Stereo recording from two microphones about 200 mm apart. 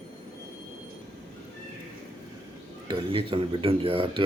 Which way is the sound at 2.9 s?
25° right (ahead or behind).